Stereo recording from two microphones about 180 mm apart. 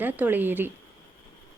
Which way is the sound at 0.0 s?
10° right (ahead or behind).